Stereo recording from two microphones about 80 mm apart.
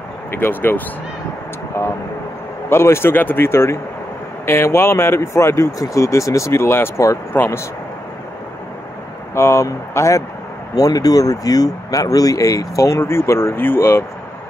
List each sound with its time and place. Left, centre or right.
0.3 s speech: left
9.3 s speech: left
10.7 s speech: left